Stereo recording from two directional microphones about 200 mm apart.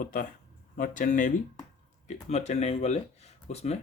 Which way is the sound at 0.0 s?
45° left (ahead or behind).